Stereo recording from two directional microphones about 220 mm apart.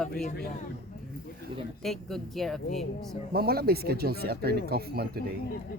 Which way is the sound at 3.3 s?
45° right (ahead or behind).